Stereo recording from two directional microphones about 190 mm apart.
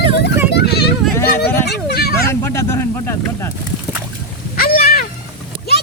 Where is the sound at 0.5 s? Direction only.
60° left (ahead or behind).